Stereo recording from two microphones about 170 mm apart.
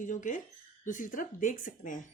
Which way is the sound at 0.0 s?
50° left (ahead or behind).